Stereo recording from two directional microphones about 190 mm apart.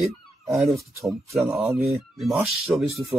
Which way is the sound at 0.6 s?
Centre (ahead or behind).